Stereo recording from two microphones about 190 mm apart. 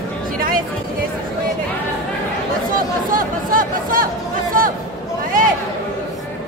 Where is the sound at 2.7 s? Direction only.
45° right (ahead or behind).